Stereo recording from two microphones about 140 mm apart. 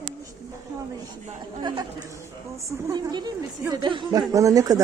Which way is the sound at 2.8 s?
25° right (ahead or behind).